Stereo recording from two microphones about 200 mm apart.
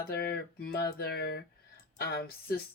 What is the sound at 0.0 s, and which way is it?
Speech, 50° left (ahead or behind).